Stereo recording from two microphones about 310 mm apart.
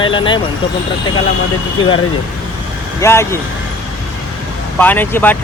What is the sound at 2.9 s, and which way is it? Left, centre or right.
Speech, centre.